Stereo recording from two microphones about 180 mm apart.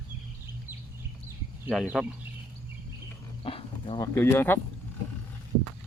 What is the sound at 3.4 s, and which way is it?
Wild animals, 30° left (ahead or behind).